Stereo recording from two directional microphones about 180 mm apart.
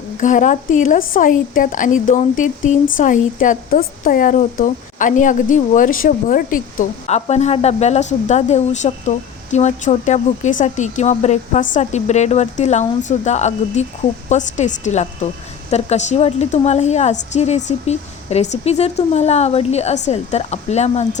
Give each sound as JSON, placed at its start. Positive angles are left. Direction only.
{"t": 0.2, "sound": "a woman's voice", "side_deg": 45}